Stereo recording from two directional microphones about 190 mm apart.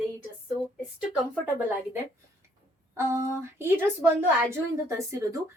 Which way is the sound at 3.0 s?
15° right (ahead or behind).